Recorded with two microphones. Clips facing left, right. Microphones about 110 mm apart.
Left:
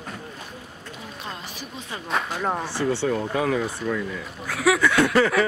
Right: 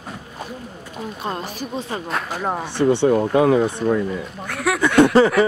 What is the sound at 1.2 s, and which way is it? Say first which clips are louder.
Speech: right 10 dB; 50° right (ahead or behind).